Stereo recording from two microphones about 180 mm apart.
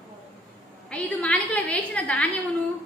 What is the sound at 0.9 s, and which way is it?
A woman's voice, 10° left (ahead or behind).